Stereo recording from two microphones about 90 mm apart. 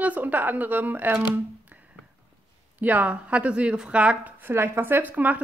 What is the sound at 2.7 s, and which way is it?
A woman's voice, 15° right (ahead or behind).